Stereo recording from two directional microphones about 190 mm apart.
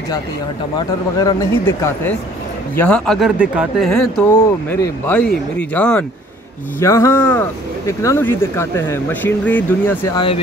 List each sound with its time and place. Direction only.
0.7 s speech: 20° left (ahead or behind)
10.1 s speech: 30° left (ahead or behind)